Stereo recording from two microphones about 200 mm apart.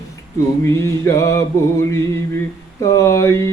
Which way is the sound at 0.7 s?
15° left (ahead or behind).